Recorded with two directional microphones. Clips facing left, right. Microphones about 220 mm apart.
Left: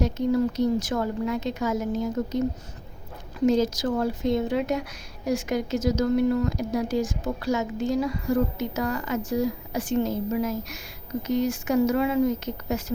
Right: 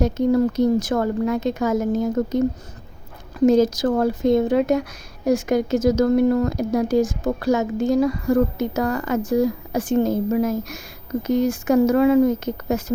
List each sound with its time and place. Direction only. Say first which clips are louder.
0.0 s speech: right 5 dB; 50° right (ahead or behind)
3.4 s speech: right 6 dB; 50° right (ahead or behind)